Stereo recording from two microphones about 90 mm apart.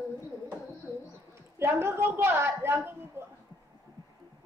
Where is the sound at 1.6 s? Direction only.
25° right (ahead or behind).